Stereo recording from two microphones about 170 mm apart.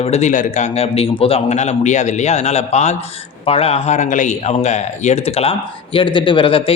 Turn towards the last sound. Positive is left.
turn(degrees=30)  # may be behind; listen again after turning